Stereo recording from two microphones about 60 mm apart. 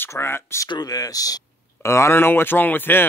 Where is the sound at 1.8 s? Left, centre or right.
Left.